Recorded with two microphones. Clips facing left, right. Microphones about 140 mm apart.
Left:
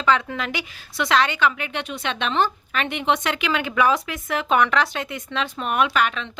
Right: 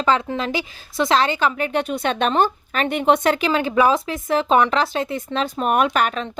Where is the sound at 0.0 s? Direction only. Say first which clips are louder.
Right 2 dB; 30° right (ahead or behind).